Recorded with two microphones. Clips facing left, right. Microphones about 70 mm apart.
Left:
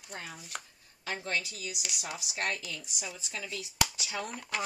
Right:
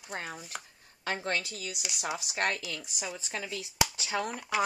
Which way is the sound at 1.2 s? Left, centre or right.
Right.